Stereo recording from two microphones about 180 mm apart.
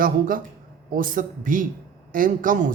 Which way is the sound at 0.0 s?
50° right (ahead or behind).